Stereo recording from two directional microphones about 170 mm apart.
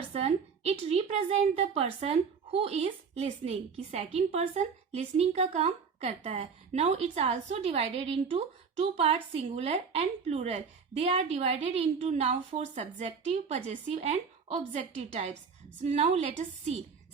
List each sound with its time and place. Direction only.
0.1 s a woman's voice: 40° right (ahead or behind)